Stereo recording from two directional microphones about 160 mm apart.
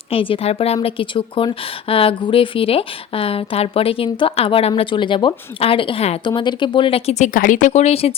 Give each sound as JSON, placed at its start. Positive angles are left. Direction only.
{"t": 0.1, "sound": "a woman's voice", "side_deg": 35}
{"t": 7.3, "sound": "speech", "side_deg": 55}